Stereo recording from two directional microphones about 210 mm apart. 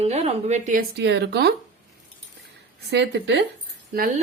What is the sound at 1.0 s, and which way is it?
Speech, 55° right (ahead or behind).